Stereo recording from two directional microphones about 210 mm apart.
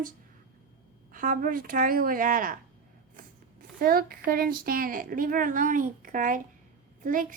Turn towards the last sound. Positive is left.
turn(degrees=-40)  # may be behind; listen again after turning